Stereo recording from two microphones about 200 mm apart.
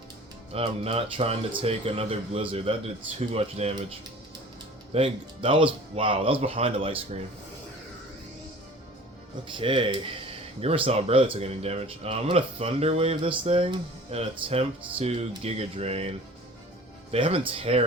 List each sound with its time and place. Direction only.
0.5 s speech: 30° right (ahead or behind)
4.9 s speech: 30° right (ahead or behind)
9.5 s speech: 25° right (ahead or behind)